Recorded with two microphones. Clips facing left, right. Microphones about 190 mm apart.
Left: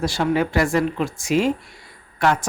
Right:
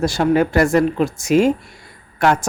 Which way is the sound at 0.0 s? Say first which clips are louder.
Right 5 dB; 45° right (ahead or behind).